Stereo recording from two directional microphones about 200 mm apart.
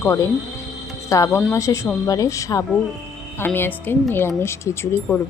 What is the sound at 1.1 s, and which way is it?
Speech, 15° left (ahead or behind).